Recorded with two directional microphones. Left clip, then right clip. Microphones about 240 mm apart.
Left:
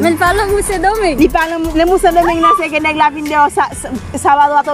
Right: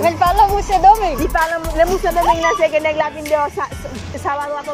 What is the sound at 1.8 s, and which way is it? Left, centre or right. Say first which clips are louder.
Speech: left 6 dB; left.